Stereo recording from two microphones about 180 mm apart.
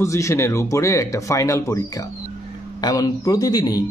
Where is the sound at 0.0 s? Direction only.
15° left (ahead or behind).